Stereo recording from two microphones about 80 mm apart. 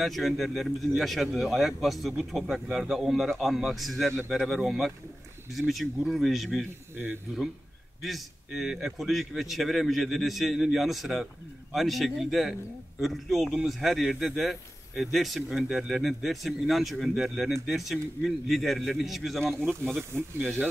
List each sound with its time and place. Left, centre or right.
0.0 s speech: centre
8.0 s speech: centre
20.2 s speech: right